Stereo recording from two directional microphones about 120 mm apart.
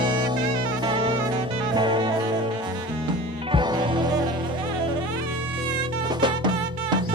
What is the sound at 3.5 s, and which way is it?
Music, 40° right (ahead or behind).